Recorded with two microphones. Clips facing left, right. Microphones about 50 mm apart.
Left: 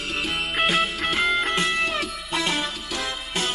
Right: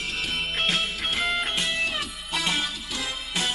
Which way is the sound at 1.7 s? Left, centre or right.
Left.